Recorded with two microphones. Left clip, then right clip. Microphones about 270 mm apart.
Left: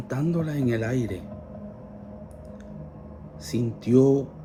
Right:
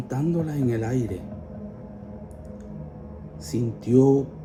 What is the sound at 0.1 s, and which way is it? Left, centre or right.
Speech, left.